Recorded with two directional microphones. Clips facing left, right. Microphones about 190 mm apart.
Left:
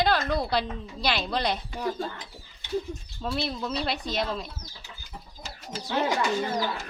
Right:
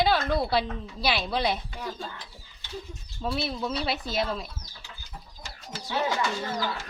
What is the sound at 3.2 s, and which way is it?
A woman's voice, 5° right (ahead or behind).